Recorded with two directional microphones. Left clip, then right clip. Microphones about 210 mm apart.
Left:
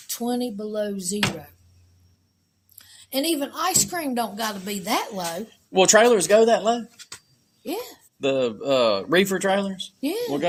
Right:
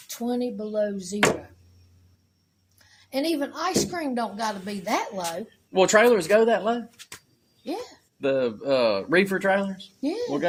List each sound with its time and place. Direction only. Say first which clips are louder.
0.1 s a woman's voice: left 1 dB; 40° left (ahead or behind)
2.7 s a woman's voice: left 2 dB; 40° left (ahead or behind)
6.9 s a sound: left 2 dB; 15° right (ahead or behind)
7.7 s speech: left 2 dB; 40° left (ahead or behind)
8.2 s speech: left 1 dB; 30° left (ahead or behind)